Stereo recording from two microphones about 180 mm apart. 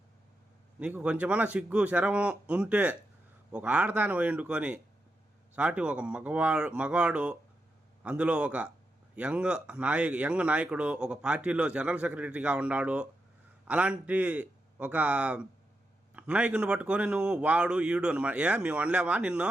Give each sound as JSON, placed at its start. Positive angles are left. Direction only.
{"t": 0.8, "sound": "speech", "side_deg": -5}